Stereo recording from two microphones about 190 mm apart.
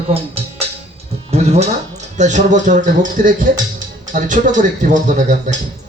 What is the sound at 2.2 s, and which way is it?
Speech, 40° right (ahead or behind).